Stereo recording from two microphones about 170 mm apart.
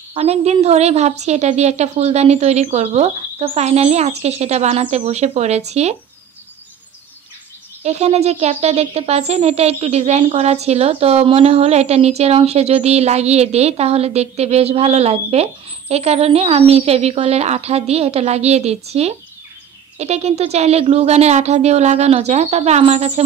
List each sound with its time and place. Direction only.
0.1 s speech: 35° right (ahead or behind)
7.8 s speech: 40° right (ahead or behind)